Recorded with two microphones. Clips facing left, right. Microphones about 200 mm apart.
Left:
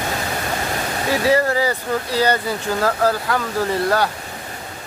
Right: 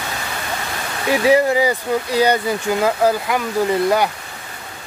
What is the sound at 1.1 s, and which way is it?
Speech, 15° right (ahead or behind).